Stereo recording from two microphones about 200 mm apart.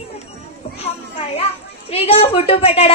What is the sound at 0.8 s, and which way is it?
A child's voice, 30° left (ahead or behind).